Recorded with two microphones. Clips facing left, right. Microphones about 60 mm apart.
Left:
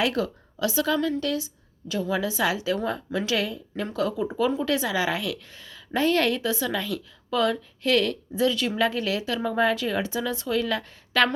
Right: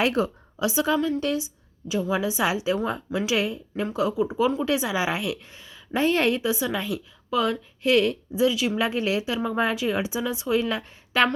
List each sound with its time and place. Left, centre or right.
0.0 s a woman's voice: right; by 4.6 s centre
4.6 s a woman's voice: centre
8.8 s a woman's voice: right